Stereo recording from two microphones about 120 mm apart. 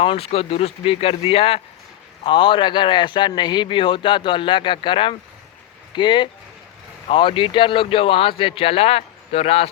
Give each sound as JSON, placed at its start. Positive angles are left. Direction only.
{"t": 0.0, "sound": "a man's voice", "side_deg": 55}
{"t": 2.2, "sound": "a man's voice", "side_deg": 45}